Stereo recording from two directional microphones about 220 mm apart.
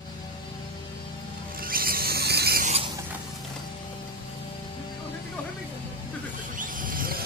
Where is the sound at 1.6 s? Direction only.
40° right (ahead or behind).